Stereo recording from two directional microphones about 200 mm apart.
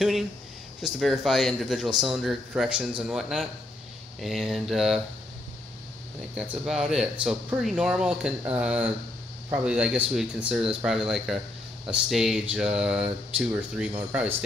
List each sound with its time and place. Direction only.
0.8 s speech: centre (ahead or behind)
6.3 s speech: 5° right (ahead or behind)